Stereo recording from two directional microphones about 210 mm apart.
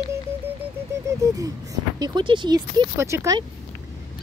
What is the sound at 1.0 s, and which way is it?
Speech, 15° right (ahead or behind).